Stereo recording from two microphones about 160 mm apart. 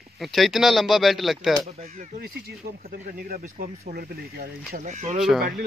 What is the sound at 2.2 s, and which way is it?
Speech, 85° right.